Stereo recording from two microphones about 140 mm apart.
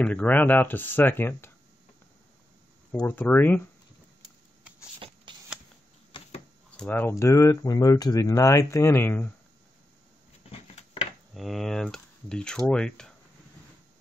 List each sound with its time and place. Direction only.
0.0 s speech: 10° left (ahead or behind)
3.1 s speech: 15° left (ahead or behind)
5.3 s shuffling cards: 35° right (ahead or behind)
6.8 s speech: 15° left (ahead or behind)
10.5 s a sound: 45° left (ahead or behind)
11.3 s speech: centre (ahead or behind)